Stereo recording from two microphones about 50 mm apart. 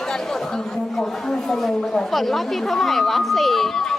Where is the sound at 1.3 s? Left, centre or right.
Centre.